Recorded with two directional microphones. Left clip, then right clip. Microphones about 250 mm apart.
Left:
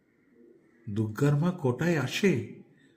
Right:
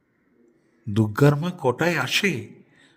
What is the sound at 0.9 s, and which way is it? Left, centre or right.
Mantra, right.